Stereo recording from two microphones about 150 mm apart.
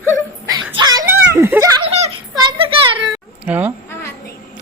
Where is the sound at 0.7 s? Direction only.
25° right (ahead or behind).